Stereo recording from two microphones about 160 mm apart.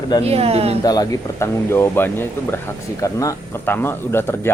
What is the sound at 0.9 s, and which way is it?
Speech, 25° left (ahead or behind).